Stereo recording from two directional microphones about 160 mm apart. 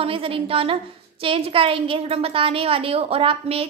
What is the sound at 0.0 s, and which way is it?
A woman's voice, 35° right (ahead or behind).